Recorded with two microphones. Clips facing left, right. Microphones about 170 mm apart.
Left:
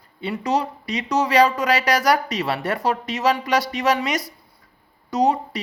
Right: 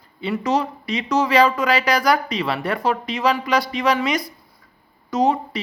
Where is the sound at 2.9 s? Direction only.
40° left (ahead or behind).